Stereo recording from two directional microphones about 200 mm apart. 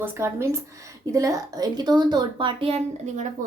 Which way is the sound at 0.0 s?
10° right (ahead or behind).